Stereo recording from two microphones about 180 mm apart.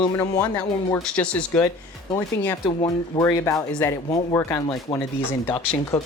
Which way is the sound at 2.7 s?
30° left (ahead or behind).